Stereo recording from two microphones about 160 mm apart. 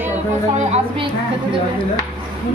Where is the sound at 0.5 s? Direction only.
40° right (ahead or behind).